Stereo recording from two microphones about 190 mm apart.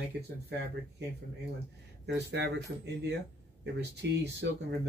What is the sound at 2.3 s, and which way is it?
Speech, 60° right (ahead or behind).